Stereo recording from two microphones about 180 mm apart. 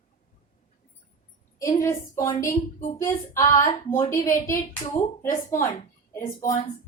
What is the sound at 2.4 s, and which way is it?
Speech, 45° left (ahead or behind).